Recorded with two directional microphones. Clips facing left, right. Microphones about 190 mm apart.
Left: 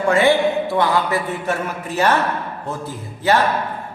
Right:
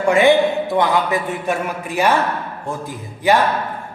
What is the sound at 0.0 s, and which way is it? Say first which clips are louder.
A man's voice: right 2 dB; 15° right (ahead or behind).